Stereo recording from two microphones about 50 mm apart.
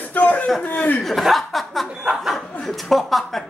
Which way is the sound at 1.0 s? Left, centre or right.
Centre.